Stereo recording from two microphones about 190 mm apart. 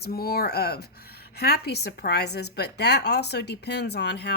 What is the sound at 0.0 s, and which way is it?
A woman's voice, 55° left (ahead or behind).